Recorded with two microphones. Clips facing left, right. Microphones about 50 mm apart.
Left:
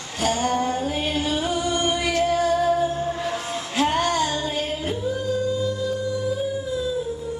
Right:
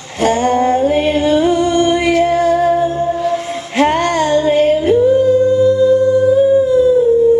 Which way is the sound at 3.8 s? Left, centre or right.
Right.